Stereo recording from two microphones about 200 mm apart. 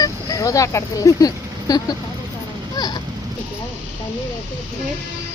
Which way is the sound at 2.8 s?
20° left (ahead or behind).